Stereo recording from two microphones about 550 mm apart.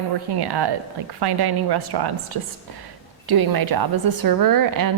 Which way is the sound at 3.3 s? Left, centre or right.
Right.